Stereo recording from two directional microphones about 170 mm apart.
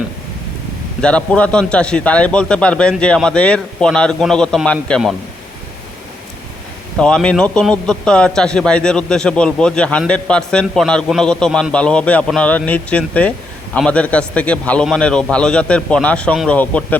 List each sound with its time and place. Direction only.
1.0 s a man's voice: 5° left (ahead or behind)
6.9 s a man's voice: 5° left (ahead or behind)